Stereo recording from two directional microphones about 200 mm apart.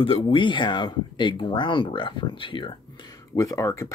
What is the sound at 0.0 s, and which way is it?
Speech, 25° left (ahead or behind).